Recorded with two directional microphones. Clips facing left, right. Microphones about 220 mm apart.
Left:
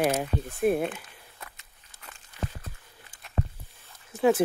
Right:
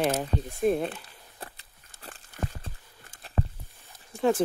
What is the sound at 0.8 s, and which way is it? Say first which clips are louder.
Walk: left 1 dB; 35° right (ahead or behind).